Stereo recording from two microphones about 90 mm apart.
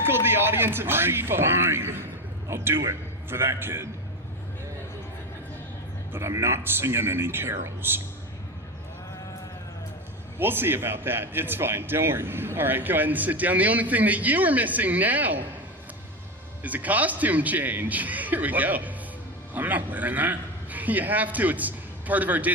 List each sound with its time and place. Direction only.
0.0 s a man's voice: 25° right (ahead or behind)
6.1 s a man's voice: 30° right (ahead or behind)
10.3 s a man's voice: 25° right (ahead or behind)
16.6 s a man's voice: 20° right (ahead or behind)